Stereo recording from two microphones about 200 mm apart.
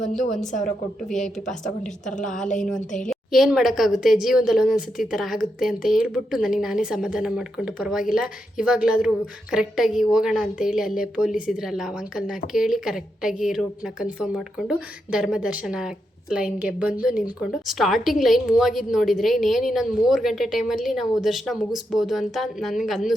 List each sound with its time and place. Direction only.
0.0 s speech: 40° left (ahead or behind)
1.0 s a woman's voice: centre (ahead or behind)
2.0 s speech: 40° left (ahead or behind)
3.1 s a woman's voice: centre (ahead or behind)